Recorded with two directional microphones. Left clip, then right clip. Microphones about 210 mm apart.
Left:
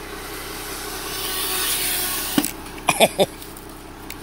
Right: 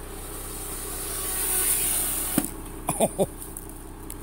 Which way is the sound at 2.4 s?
10° right (ahead or behind).